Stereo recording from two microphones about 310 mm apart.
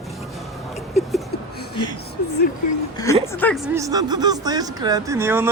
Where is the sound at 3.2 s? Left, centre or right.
Centre.